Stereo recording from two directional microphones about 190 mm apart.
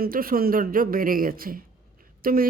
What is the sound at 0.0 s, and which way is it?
Speech, 50° right (ahead or behind).